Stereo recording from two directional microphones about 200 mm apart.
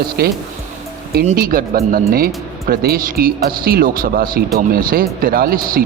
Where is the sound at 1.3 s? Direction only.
45° right (ahead or behind).